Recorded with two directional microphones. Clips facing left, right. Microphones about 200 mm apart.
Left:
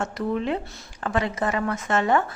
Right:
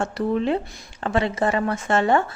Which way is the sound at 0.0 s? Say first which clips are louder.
Right 3 dB; 30° right (ahead or behind).